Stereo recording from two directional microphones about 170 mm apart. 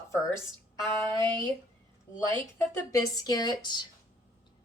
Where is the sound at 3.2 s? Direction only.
25° left (ahead or behind).